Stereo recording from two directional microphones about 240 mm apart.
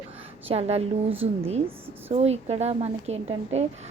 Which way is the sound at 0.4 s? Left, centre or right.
Right.